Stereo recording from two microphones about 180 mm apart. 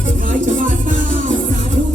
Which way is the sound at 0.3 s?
45° right (ahead or behind).